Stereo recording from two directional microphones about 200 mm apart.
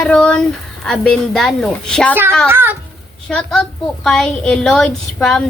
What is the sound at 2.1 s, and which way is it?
Speech, 10° right (ahead or behind).